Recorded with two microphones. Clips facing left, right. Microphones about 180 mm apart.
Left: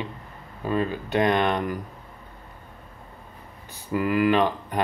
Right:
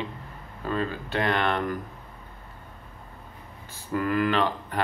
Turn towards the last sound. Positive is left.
turn(degrees=15)  # may be behind; listen again after turning